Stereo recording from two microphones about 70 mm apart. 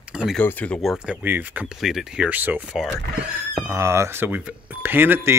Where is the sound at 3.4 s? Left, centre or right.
Right.